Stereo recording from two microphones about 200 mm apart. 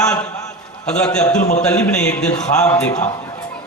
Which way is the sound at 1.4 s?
35° left (ahead or behind).